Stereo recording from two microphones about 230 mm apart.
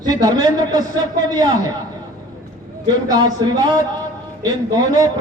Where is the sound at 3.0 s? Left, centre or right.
Centre.